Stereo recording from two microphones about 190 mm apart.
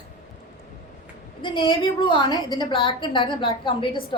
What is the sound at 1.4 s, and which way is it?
A woman's voice, 25° left (ahead or behind).